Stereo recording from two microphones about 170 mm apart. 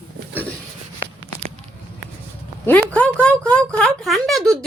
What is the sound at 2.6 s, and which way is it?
Speech, 10° left (ahead or behind).